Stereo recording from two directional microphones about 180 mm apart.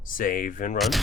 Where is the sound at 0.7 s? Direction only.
Centre (ahead or behind).